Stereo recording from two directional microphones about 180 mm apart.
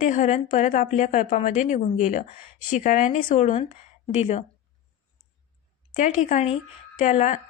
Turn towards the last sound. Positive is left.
turn(degrees=40)  # may be behind; listen again after turning